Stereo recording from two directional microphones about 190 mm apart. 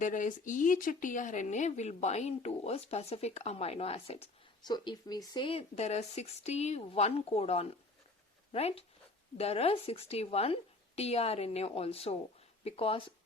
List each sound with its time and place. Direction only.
0.0 s speech: 45° left (ahead or behind)